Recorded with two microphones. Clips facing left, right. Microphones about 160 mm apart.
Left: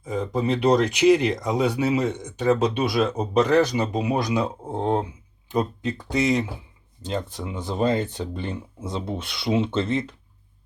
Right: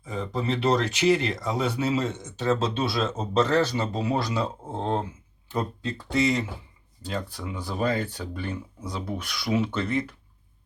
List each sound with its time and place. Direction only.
0.0 s speech: 15° left (ahead or behind)